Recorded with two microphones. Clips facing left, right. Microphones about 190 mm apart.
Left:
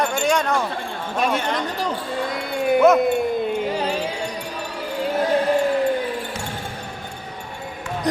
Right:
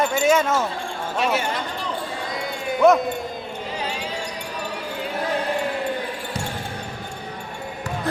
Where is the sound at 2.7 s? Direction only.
Centre (ahead or behind).